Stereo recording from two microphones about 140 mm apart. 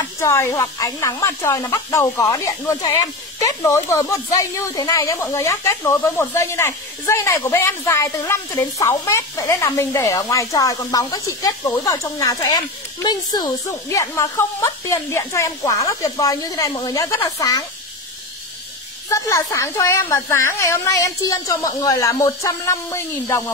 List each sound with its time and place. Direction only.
0.2 s speech: 20° left (ahead or behind)
13.7 s speech: 20° left (ahead or behind)
19.0 s speech: 25° left (ahead or behind)